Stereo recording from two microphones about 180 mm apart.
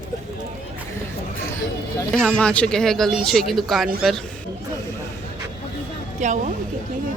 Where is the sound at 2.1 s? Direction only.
5° left (ahead or behind).